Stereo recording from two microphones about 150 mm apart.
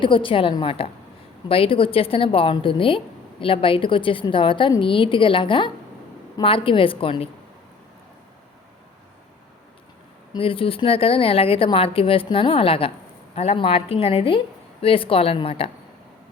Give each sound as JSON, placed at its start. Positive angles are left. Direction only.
{"t": 0.0, "sound": "speech", "side_deg": 35}
{"t": 10.3, "sound": "speech", "side_deg": 35}